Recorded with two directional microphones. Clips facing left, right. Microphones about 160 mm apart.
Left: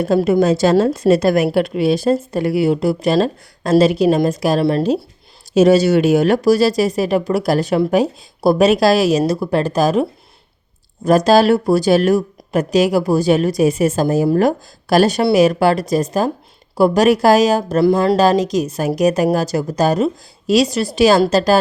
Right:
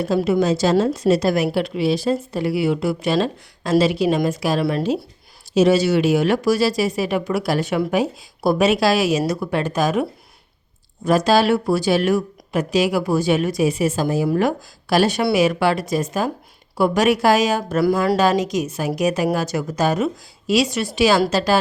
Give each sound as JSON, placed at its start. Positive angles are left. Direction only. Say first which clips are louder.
{"t": 0.2, "sound": "a woman's voice", "louder": "left 3 dB", "side_deg": 45}
{"t": 17.8, "sound": "speech", "louder": "left 4 dB", "side_deg": 25}